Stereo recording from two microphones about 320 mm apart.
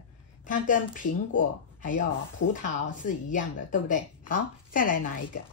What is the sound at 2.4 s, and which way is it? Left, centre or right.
Speech, left.